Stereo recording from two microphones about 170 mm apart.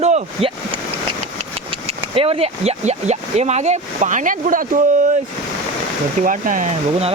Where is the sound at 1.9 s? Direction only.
35° right (ahead or behind); by 4.8 s 50° right (ahead or behind).